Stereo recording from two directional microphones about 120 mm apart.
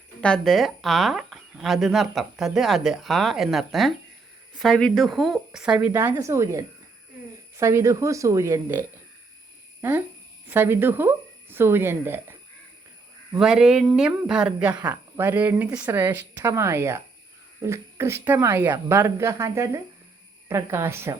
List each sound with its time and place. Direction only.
0.2 s speech: 5° left (ahead or behind)
5.9 s a woman's voice: 15° right (ahead or behind)
9.8 s speech: 15° right (ahead or behind)
13.4 s a woman's voice: 5° right (ahead or behind); by 21.2 s 20° right (ahead or behind)